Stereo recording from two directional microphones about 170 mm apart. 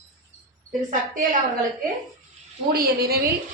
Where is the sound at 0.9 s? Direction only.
50° right (ahead or behind).